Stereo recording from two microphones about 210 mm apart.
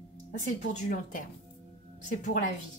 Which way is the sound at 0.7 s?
35° left (ahead or behind).